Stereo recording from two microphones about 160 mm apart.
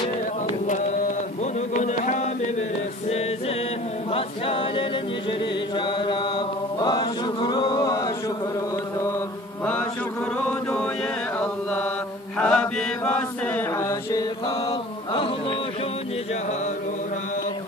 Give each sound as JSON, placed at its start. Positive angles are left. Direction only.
{"t": 1.4, "sound": "a sound", "side_deg": 50}
{"t": 4.1, "sound": "a capella", "side_deg": 35}
{"t": 5.8, "sound": "chant", "side_deg": 30}
{"t": 11.3, "sound": "chant", "side_deg": 10}
{"t": 14.7, "sound": "chant", "side_deg": 30}